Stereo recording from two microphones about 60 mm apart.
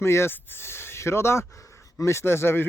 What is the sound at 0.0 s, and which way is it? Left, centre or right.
Speech, left.